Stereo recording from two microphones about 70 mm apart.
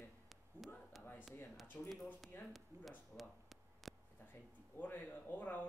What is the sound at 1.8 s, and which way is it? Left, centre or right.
Speech, centre.